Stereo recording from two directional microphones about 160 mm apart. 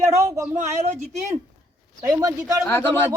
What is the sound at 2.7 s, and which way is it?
Speech, 15° left (ahead or behind).